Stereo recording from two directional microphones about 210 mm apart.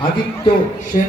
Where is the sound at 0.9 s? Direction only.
40° left (ahead or behind).